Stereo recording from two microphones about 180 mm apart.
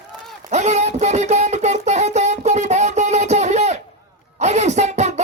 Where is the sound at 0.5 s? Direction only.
40° right (ahead or behind).